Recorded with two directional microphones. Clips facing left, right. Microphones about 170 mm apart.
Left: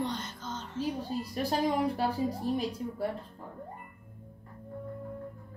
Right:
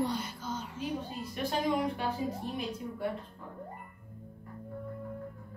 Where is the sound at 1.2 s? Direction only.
35° left (ahead or behind).